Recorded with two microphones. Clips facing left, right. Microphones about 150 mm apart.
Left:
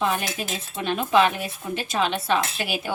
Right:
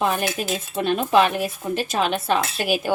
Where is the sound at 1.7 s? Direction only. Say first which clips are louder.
Right 1 dB; 45° right (ahead or behind).